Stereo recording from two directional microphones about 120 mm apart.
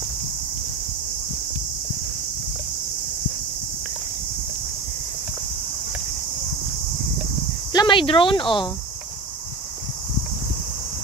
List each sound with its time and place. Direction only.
7.7 s speech: 40° left (ahead or behind)